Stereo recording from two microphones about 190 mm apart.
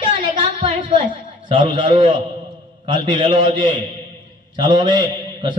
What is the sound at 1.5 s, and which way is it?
A man's voice, 25° right (ahead or behind).